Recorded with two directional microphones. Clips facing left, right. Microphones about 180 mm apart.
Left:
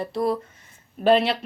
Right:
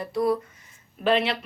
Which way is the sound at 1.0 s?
35° left (ahead or behind).